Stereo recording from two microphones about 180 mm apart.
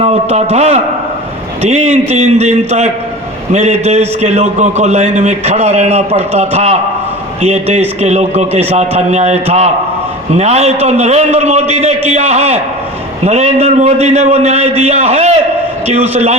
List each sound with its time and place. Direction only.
0.0 s a man's voice: 35° right (ahead or behind)